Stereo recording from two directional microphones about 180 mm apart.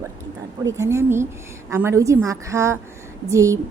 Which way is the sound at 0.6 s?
15° right (ahead or behind).